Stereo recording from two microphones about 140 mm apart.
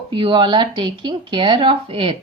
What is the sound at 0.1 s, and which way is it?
Speech, 35° right (ahead or behind).